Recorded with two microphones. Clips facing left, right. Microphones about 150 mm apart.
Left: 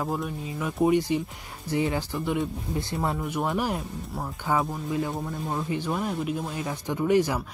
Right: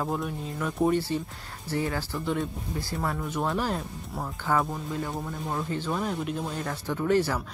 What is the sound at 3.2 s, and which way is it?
Speech, 10° left (ahead or behind).